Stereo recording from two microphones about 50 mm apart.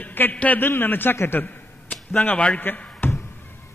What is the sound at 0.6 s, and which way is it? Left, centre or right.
Speech, left.